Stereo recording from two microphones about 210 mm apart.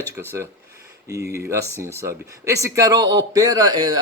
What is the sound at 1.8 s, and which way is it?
A man's voice, 15° right (ahead or behind).